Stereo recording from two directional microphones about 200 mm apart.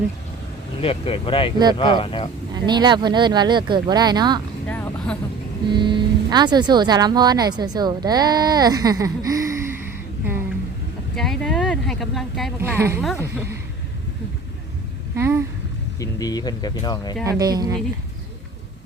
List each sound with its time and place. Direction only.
0.8 s speech: 30° left (ahead or behind)
2.6 s speech: 20° right (ahead or behind)
4.6 s vehicle: 10° left (ahead or behind)
5.7 s speech: 25° right (ahead or behind)
11.1 s speech: centre (ahead or behind)
12.5 s speech: 10° right (ahead or behind)
15.1 s a sound: 15° right (ahead or behind)
16.0 s speech: 20° left (ahead or behind)
17.2 s speech: 20° right (ahead or behind)